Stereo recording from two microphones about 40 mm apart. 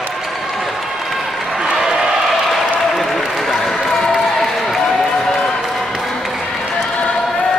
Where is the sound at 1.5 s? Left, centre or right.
Centre.